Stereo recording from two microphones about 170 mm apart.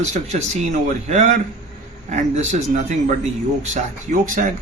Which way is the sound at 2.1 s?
45° right (ahead or behind).